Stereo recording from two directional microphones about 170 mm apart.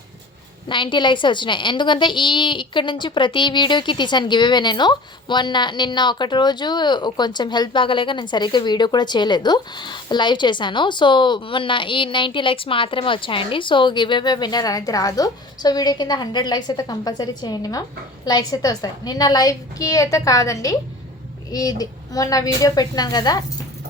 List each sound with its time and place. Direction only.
0.7 s a woman's voice: 30° left (ahead or behind)